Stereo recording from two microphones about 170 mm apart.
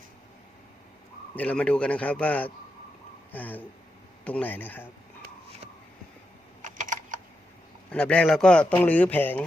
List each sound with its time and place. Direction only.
1.4 s speech: 5° left (ahead or behind)
6.6 s typing: 45° right (ahead or behind)
7.9 s speech: 5° left (ahead or behind)